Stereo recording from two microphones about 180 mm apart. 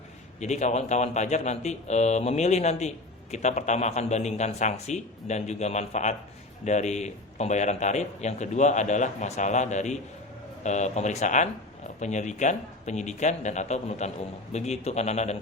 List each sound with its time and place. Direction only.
0.3 s speech: 40° left (ahead or behind)